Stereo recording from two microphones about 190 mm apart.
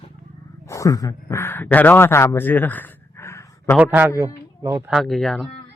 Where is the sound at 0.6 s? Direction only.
15° left (ahead or behind).